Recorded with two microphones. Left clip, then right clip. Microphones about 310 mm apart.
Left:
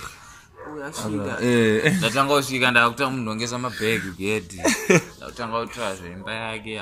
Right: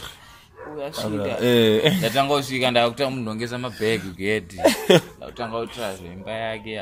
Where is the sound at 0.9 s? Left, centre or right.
Right.